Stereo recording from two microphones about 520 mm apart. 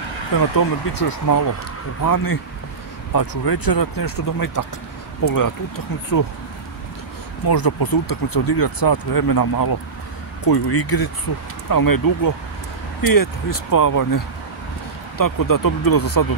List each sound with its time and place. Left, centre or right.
0.6 s speech: left
7.4 s speech: left